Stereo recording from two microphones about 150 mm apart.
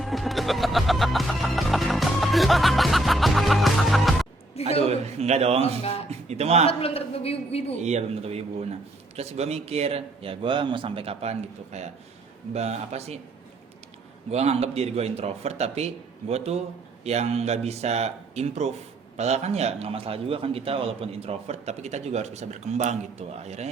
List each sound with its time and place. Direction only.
0.0 s music: centre (ahead or behind)
4.6 s a sound: 45° left (ahead or behind)
4.9 s a man's voice: 45° right (ahead or behind)
6.7 s a man's voice: 40° left (ahead or behind)
7.8 s a man's voice: 50° right (ahead or behind)
14.3 s a man's voice: 45° right (ahead or behind)